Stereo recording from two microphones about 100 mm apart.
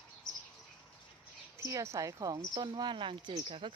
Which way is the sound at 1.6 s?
30° right (ahead or behind).